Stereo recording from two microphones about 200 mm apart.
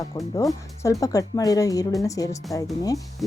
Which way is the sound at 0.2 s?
15° left (ahead or behind).